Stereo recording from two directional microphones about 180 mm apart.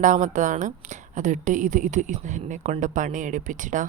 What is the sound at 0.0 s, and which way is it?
A woman's voice, 45° right (ahead or behind).